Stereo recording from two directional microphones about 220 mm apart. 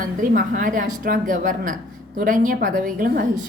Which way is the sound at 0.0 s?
40° right (ahead or behind).